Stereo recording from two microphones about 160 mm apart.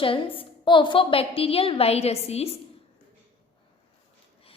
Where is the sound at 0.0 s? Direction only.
35° left (ahead or behind).